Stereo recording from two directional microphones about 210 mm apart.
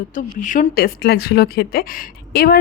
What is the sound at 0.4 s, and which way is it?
Speech, 40° left (ahead or behind).